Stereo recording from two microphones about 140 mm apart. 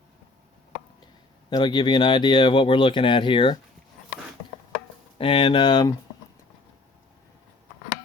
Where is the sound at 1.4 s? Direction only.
30° left (ahead or behind).